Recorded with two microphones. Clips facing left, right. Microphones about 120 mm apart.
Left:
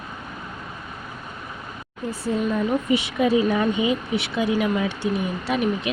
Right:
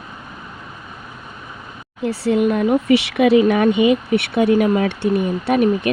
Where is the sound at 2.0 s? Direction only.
75° right (ahead or behind).